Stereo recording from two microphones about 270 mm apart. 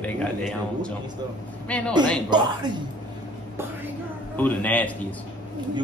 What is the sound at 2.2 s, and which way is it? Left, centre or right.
Speech, centre.